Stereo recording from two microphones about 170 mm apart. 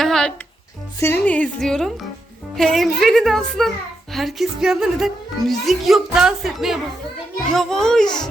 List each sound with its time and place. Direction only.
0.0 s music: 5° left (ahead or behind)
0.9 s speech: 15° left (ahead or behind)